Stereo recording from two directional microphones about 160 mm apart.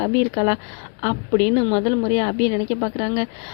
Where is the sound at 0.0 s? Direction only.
35° left (ahead or behind).